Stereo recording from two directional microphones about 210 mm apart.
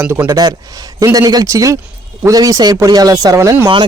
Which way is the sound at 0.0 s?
10° right (ahead or behind).